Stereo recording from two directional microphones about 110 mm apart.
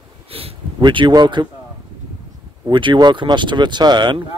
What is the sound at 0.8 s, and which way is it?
Speech, 45° right (ahead or behind).